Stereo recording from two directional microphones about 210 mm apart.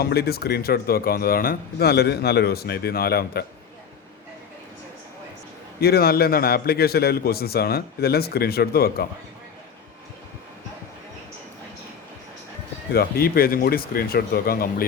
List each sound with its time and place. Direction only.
0.0 s speech: 50° left (ahead or behind)
5.8 s speech: 45° left (ahead or behind)
12.9 s speech: 45° left (ahead or behind)